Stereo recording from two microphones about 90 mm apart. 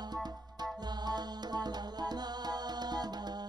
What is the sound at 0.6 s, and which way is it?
Music, 50° right (ahead or behind).